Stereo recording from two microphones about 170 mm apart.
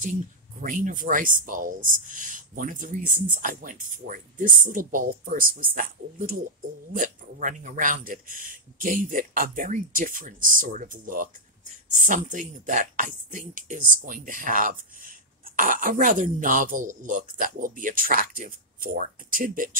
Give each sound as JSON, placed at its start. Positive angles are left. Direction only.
{"t": 0.6, "sound": "speech", "side_deg": -50}